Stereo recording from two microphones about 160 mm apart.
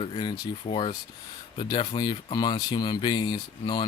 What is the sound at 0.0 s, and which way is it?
Speech, 30° left (ahead or behind).